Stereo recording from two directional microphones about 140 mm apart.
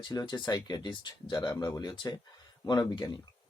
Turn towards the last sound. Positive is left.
turn(degrees=30)  # may be behind; listen again after turning